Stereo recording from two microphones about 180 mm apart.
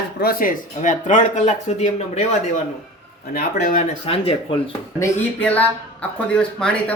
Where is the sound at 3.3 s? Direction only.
55° left (ahead or behind).